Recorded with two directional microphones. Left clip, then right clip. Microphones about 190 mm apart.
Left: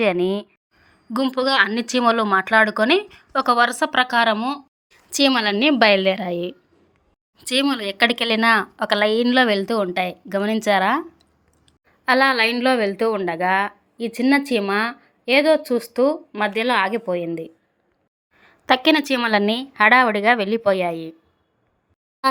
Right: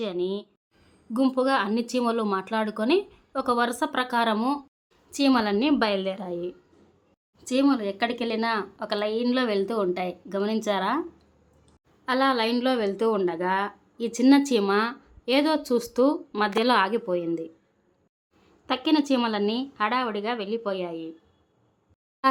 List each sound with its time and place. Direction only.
0.2 s speech: 20° left (ahead or behind)
1.1 s a woman's voice: 10° left (ahead or behind)
4.4 s a woman's voice: 5° left (ahead or behind)
4.9 s speech: 20° left (ahead or behind)
12.0 s a woman's voice: 20° left (ahead or behind)
18.6 s speech: 25° left (ahead or behind)